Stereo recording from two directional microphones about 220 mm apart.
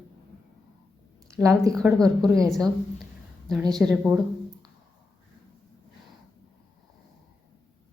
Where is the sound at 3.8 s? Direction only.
Centre (ahead or behind).